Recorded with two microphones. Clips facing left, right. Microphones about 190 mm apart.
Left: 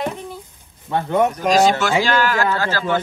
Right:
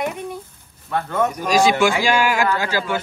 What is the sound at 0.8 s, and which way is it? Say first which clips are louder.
Speech: left 3 dB; 20° left (ahead or behind).